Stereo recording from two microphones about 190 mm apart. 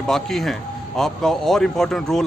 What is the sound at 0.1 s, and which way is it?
Speech, centre (ahead or behind).